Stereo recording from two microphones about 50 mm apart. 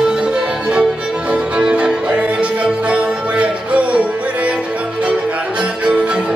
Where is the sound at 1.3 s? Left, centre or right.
Right.